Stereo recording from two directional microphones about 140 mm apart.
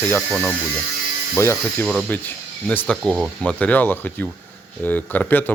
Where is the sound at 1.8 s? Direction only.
5° right (ahead or behind).